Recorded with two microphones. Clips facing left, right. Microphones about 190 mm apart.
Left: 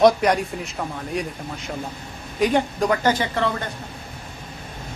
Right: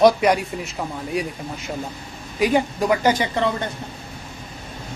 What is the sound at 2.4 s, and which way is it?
A woman's voice, 5° right (ahead or behind).